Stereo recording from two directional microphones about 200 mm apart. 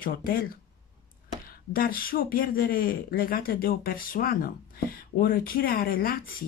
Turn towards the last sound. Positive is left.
turn(degrees=45)  # may be behind; listen again after turning